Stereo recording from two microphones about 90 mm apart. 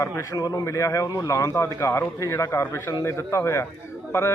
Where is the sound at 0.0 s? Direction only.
45° left (ahead or behind).